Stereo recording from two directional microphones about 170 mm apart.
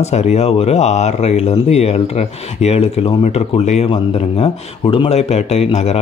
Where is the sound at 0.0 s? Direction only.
40° left (ahead or behind).